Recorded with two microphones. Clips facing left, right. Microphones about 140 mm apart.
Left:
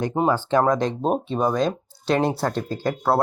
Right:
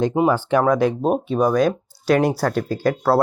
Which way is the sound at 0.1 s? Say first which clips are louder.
Right 3 dB; 10° right (ahead or behind).